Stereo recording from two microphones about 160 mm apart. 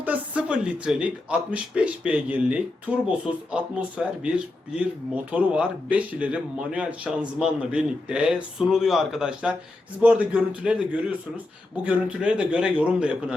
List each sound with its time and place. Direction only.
0.0 s speech: 10° right (ahead or behind)